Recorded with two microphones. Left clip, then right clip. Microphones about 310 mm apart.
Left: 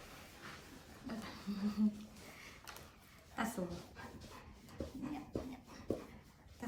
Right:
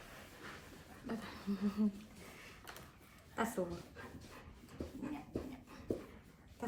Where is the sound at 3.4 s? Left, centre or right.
Centre.